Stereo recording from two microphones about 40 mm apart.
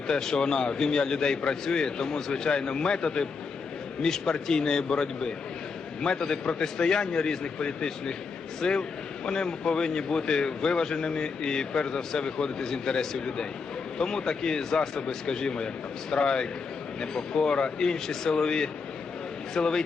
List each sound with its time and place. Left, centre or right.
0.1 s a man's voice: centre